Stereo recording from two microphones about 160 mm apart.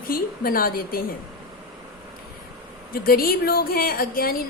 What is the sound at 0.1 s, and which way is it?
Speech, 65° left (ahead or behind).